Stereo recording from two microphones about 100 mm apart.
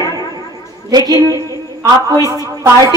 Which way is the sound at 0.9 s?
45° right (ahead or behind).